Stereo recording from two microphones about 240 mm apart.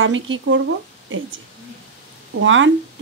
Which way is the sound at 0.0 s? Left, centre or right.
Right.